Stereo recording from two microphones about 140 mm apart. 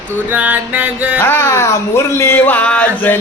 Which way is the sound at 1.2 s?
15° left (ahead or behind).